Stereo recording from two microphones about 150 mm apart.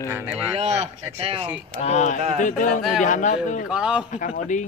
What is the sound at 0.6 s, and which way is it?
Speech, 45° right (ahead or behind).